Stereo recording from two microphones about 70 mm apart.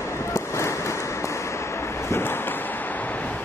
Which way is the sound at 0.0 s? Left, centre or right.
Left.